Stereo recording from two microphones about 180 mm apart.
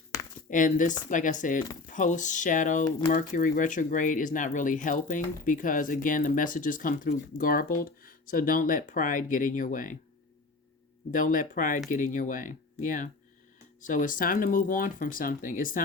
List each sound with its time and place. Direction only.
0.5 s speech: 45° left (ahead or behind)
11.1 s speech: 50° left (ahead or behind)